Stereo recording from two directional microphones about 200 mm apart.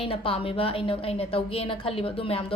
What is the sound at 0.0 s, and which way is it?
A woman's voice, 30° left (ahead or behind).